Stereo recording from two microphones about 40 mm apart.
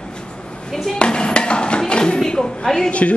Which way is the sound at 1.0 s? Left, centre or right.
Left.